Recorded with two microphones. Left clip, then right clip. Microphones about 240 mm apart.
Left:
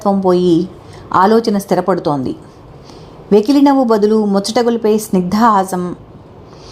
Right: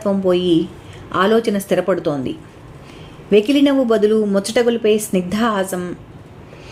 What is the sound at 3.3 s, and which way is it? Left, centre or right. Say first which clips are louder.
Speech: left 3 dB; centre.